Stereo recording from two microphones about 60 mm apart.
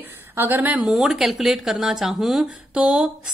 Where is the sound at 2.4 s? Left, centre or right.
Centre.